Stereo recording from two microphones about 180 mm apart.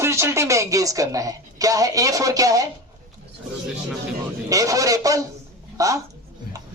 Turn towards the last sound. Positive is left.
turn(degrees=-20)  # may be behind; listen again after turning